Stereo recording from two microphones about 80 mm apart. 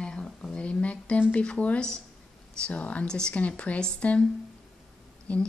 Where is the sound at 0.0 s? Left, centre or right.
Centre.